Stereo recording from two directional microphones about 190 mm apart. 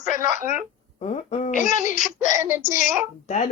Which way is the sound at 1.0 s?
35° left (ahead or behind).